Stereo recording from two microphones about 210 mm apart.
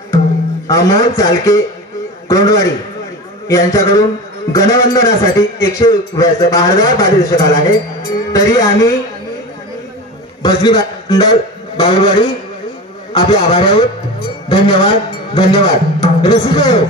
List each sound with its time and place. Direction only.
0.7 s a man's voice: 15° left (ahead or behind)
10.4 s a man's voice: 20° left (ahead or behind)